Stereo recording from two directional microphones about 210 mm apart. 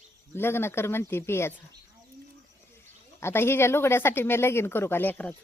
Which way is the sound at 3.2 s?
10° left (ahead or behind).